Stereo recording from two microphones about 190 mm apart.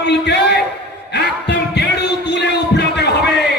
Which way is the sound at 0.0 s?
65° left (ahead or behind).